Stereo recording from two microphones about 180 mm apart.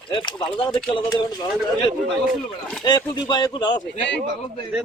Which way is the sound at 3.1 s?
20° left (ahead or behind).